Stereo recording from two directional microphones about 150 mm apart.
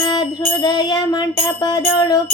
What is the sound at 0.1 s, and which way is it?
Music, 30° left (ahead or behind).